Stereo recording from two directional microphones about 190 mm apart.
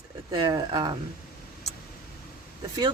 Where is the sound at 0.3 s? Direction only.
20° right (ahead or behind).